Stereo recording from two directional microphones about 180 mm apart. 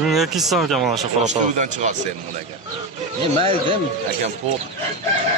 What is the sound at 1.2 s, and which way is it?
Speech, 40° right (ahead or behind).